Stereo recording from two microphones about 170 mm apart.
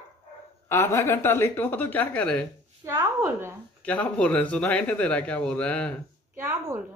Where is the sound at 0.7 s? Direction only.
15° left (ahead or behind).